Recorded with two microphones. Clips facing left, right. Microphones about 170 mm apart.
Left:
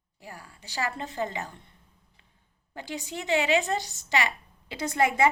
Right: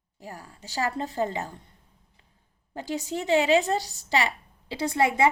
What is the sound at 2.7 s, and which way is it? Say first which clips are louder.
A woman's voice: right 6 dB; 40° right (ahead or behind).